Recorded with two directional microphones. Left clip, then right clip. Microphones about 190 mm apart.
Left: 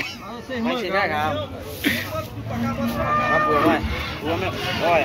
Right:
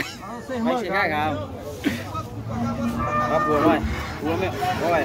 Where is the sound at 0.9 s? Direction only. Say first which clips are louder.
Left 2 dB; 70° right (ahead or behind).